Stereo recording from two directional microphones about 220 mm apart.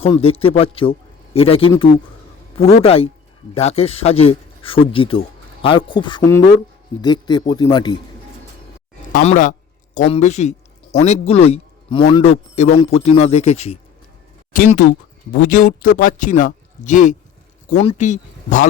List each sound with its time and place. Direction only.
0.0 s a man's voice: 25° left (ahead or behind)
2.8 s a man's voice: 25° left (ahead or behind)
9.1 s a man's voice: 35° left (ahead or behind)